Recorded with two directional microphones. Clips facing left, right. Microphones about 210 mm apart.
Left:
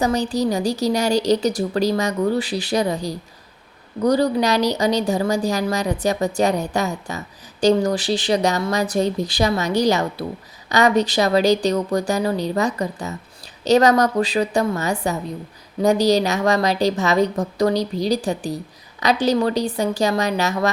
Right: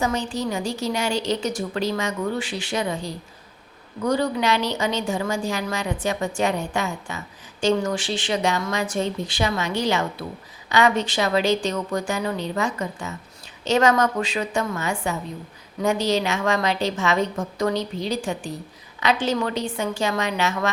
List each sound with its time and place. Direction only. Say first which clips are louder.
0.0 s a woman's voice: left 5 dB; 35° left (ahead or behind)